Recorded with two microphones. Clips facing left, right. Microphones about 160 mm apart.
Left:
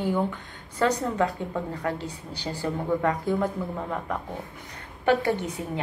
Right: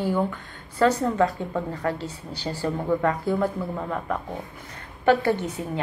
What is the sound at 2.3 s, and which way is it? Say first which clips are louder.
Speech: right 2 dB; 15° left (ahead or behind).